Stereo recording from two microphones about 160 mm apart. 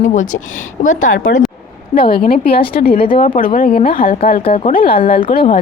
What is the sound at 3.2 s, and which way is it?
Speech, 55° left (ahead or behind).